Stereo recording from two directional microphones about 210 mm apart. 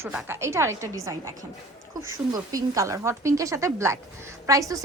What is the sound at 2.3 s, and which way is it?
A woman's voice, 15° right (ahead or behind).